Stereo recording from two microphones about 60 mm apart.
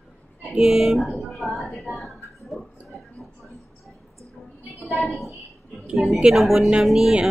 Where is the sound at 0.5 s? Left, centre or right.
Centre.